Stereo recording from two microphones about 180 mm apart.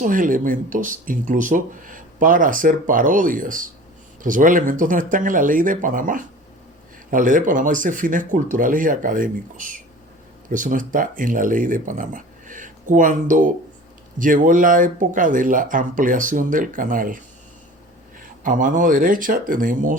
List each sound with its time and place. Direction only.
0.0 s speech: 50° right (ahead or behind)
18.2 s speech: 45° right (ahead or behind)